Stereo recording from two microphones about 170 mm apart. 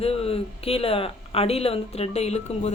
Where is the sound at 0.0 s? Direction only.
35° left (ahead or behind).